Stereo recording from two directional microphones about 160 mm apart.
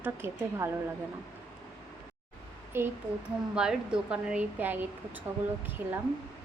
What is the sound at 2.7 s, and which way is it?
Speech, 15° right (ahead or behind).